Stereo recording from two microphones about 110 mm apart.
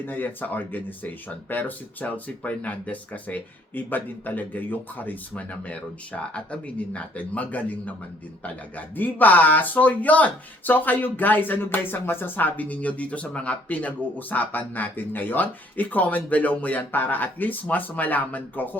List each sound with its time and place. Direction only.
0.0 s speech: 15° left (ahead or behind)
9.0 s speech: 15° left (ahead or behind)